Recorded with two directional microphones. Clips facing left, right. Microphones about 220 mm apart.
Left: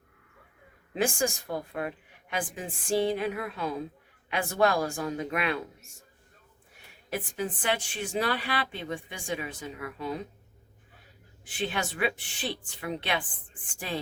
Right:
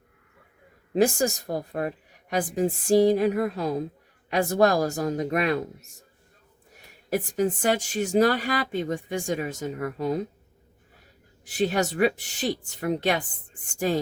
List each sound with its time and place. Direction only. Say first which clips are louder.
0.9 s a woman's voice: right 6 dB; 40° right (ahead or behind)
7.1 s speech: right 8 dB; 40° right (ahead or behind)
11.4 s a woman's voice: right 8 dB; 40° right (ahead or behind)